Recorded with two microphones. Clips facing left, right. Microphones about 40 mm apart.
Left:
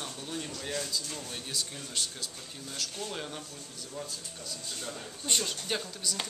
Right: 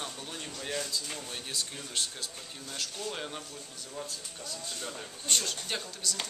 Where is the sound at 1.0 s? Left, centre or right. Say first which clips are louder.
Even; right.